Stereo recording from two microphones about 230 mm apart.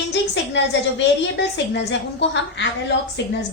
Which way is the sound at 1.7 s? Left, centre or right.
Left.